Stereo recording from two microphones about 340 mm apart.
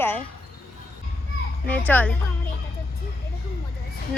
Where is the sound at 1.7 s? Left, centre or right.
Centre.